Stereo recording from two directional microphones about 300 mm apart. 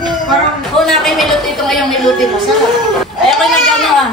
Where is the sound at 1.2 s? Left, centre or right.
Centre.